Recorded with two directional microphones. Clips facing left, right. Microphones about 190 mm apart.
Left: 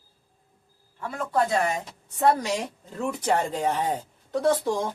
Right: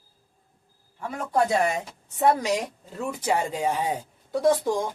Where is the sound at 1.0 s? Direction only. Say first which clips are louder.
Right 1 dB; 15° right (ahead or behind).